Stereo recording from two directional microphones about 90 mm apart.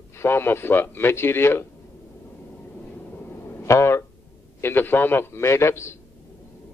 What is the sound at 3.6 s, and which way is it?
A man's voice, 30° left (ahead or behind).